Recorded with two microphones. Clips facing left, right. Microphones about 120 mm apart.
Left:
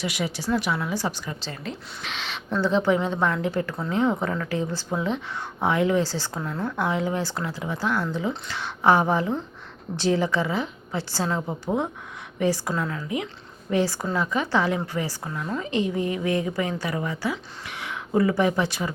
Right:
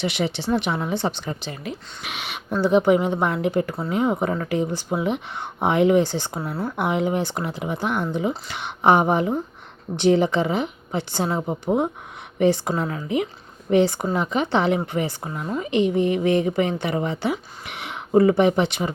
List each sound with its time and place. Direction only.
0.0 s speech: 25° right (ahead or behind)
1.4 s speech: 10° right (ahead or behind)